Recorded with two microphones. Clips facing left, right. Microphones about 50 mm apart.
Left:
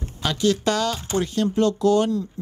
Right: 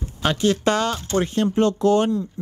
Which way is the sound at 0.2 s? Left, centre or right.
Right.